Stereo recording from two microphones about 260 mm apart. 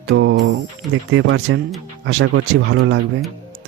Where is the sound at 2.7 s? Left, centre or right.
Right.